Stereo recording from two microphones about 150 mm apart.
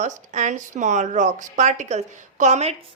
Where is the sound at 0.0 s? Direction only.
55° right (ahead or behind).